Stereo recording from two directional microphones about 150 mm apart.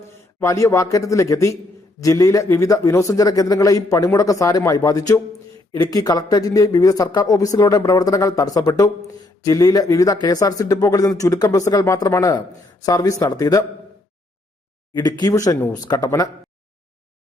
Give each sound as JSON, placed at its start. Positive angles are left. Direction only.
{"t": 0.3, "sound": "a man's voice", "side_deg": 20}
{"t": 14.9, "sound": "a man's voice", "side_deg": 25}